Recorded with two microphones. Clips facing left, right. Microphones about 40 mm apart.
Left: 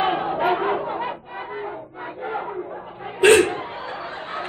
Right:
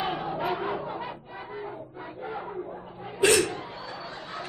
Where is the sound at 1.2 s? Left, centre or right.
Left.